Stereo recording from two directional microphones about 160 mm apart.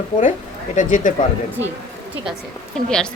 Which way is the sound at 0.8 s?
55° left (ahead or behind).